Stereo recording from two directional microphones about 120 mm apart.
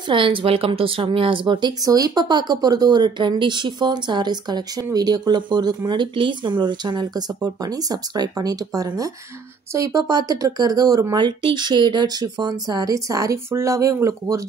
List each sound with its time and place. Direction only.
0.0 s speech: 45° right (ahead or behind); by 14.4 s 25° right (ahead or behind)